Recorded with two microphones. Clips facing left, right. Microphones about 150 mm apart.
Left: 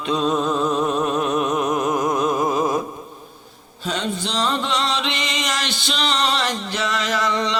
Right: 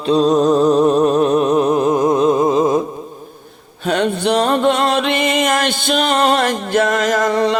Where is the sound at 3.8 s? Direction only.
60° right (ahead or behind).